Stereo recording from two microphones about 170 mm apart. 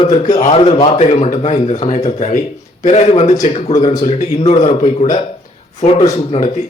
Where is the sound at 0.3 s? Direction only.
40° left (ahead or behind).